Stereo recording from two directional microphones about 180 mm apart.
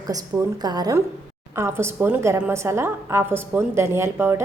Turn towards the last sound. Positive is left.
turn(degrees=-15)  # may be behind; listen again after turning